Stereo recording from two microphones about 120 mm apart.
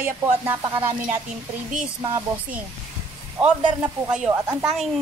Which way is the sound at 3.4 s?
10° right (ahead or behind).